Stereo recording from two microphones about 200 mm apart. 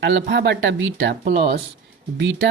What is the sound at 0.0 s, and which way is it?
Speech, 60° right (ahead or behind).